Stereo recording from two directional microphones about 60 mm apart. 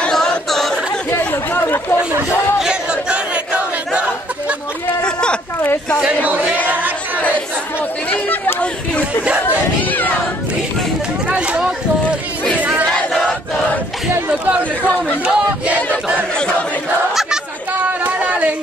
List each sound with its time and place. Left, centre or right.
0.1 s a capella: centre
1.1 s chatter: left
2.6 s a sound: centre
5.0 s a sound: centre
8.1 s speech: left
9.2 s speech: right
9.8 s speech: left
11.2 s boat: right
12.5 s battle cry: right
15.2 s speech: centre
17.1 s chatter: centre